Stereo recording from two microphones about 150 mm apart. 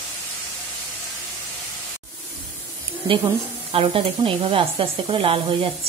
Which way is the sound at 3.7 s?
40° right (ahead or behind).